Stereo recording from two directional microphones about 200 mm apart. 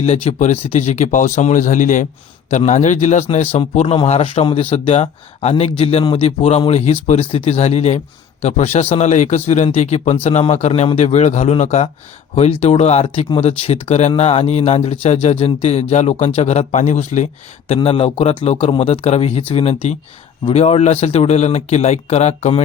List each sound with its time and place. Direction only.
0.0 s speech: 30° left (ahead or behind)